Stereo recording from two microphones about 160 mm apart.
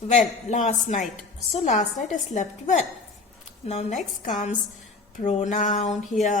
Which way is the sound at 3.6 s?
40° left (ahead or behind).